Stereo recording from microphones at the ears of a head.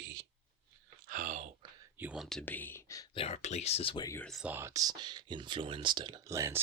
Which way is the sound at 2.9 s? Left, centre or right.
Left.